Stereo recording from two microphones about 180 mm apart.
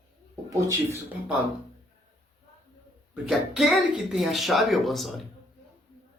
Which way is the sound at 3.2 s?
Centre (ahead or behind).